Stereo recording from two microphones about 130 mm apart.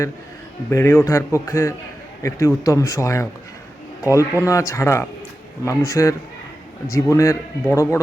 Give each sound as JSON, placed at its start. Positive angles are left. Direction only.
{"t": 0.7, "sound": "a man's voice", "side_deg": 20}